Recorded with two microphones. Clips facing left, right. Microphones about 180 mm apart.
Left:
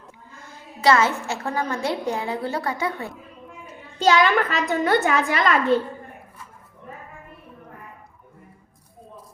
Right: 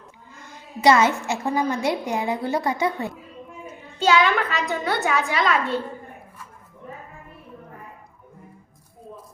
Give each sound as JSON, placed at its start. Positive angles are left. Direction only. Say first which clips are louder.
{"t": 0.8, "sound": "a woman's voice", "louder": "right 2 dB", "side_deg": -15}
{"t": 4.0, "sound": "a child's voice", "louder": "left 1 dB", "side_deg": 40}